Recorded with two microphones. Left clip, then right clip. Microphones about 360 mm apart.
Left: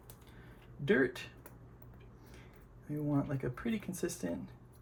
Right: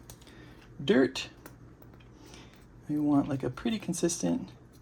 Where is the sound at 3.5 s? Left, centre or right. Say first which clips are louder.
Right 6 dB; right.